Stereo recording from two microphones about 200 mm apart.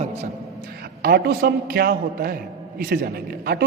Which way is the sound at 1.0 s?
50° right (ahead or behind).